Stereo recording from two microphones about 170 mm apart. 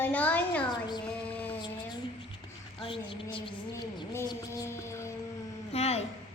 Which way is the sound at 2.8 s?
30° left (ahead or behind).